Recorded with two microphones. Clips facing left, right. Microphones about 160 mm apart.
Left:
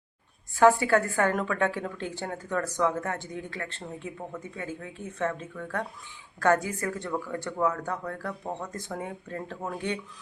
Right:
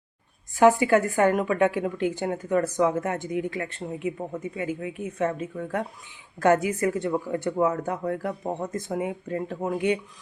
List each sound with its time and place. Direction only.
0.5 s a woman's voice: 15° right (ahead or behind)